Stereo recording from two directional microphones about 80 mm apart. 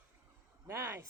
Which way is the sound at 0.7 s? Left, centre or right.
Right.